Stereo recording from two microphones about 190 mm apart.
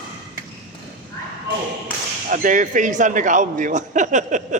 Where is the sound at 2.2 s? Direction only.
45° right (ahead or behind).